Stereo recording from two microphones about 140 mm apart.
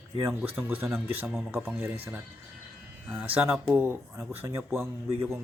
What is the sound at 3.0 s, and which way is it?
Speech, 10° right (ahead or behind).